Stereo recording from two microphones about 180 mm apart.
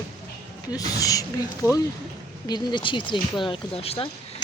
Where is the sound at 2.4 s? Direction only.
25° left (ahead or behind).